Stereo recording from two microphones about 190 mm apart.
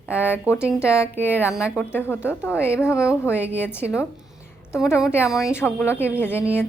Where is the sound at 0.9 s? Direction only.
15° left (ahead or behind).